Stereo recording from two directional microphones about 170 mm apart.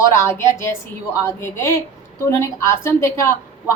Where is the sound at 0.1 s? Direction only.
15° left (ahead or behind).